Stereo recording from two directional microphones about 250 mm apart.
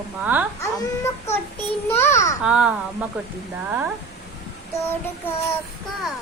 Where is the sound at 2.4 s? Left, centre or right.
Centre.